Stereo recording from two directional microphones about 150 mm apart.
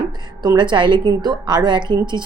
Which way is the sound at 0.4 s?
30° right (ahead or behind).